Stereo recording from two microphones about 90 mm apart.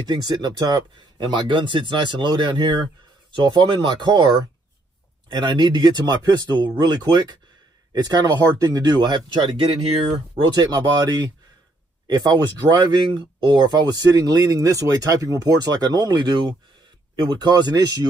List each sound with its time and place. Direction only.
0.1 s speech: 50° right (ahead or behind)
10.5 s speech: 50° right (ahead or behind)